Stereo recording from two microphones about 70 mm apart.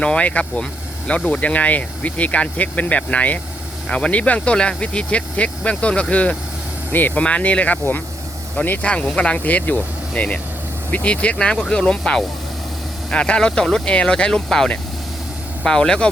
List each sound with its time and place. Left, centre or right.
0.0 s speech: centre